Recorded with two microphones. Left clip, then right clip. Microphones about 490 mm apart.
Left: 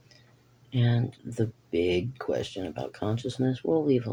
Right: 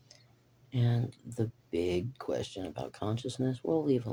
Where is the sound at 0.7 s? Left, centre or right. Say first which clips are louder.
Left 5 dB; right.